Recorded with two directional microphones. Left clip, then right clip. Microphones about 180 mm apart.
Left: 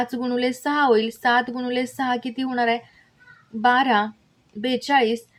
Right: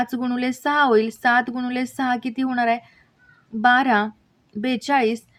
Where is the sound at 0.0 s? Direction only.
35° right (ahead or behind).